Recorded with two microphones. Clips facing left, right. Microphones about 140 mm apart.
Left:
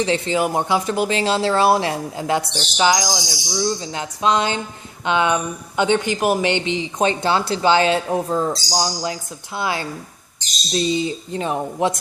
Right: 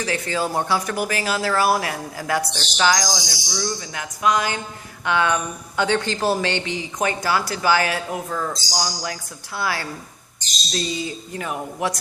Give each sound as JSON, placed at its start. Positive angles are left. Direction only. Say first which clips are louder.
{"t": 0.0, "sound": "speech", "louder": "left 5 dB", "side_deg": 20}